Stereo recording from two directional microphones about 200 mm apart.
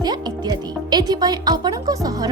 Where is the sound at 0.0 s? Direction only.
20° right (ahead or behind).